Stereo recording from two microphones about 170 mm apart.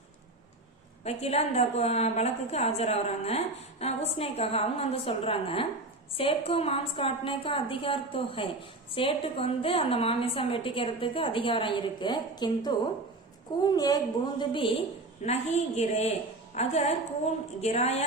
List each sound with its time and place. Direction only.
1.0 s a woman's voice: 40° left (ahead or behind)
15.2 s a woman's voice: 40° left (ahead or behind)